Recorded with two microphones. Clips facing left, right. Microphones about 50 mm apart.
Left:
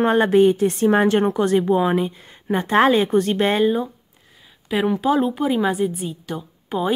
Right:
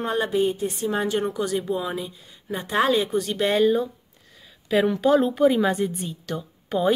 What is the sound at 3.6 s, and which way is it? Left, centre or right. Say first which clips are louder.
Speech: left 1 dB; centre.